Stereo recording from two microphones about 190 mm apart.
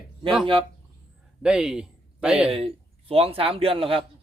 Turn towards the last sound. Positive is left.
turn(degrees=-30)  # may be behind; listen again after turning